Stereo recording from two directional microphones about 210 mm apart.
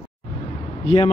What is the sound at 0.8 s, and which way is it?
Speech, 25° left (ahead or behind).